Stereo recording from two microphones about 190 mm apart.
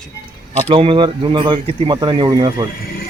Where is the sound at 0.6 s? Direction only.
30° right (ahead or behind).